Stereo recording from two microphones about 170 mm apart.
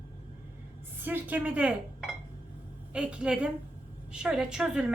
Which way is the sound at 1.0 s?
10° right (ahead or behind).